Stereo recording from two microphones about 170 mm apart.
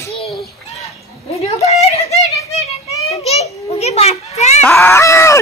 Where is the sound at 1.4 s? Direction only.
40° left (ahead or behind).